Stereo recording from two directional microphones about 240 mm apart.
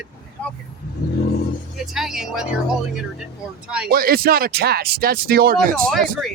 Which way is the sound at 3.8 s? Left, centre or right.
Right.